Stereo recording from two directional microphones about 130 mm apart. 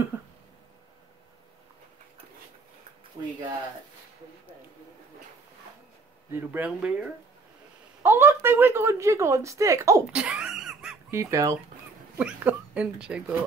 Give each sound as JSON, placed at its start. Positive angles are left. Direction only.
{"t": 6.3, "sound": "speech", "side_deg": -15}
{"t": 10.1, "sound": "a sound", "side_deg": -10}
{"t": 11.1, "sound": "speech", "side_deg": -25}
{"t": 12.2, "sound": "speech", "side_deg": -10}